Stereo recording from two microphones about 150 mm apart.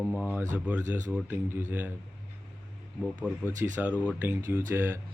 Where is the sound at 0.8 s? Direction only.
55° right (ahead or behind).